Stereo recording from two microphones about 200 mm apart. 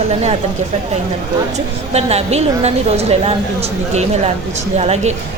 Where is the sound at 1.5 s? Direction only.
30° right (ahead or behind).